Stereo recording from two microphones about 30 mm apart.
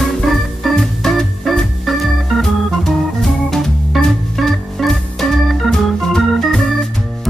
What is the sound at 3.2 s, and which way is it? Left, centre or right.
Organ, centre.